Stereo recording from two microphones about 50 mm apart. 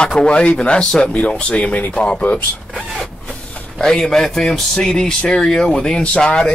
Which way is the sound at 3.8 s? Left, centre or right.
Centre.